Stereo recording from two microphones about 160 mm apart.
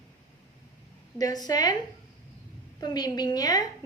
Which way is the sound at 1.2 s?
25° left (ahead or behind).